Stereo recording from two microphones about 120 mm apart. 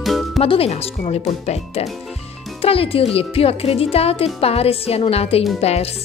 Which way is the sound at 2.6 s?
55° left (ahead or behind).